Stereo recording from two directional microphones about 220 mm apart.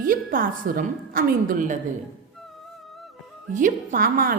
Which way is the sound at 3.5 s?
35° right (ahead or behind).